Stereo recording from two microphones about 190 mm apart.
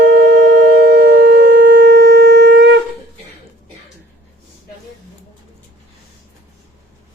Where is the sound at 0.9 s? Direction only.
60° right (ahead or behind).